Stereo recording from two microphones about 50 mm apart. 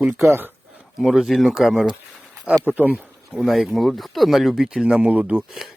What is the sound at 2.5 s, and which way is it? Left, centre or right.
Speech, right.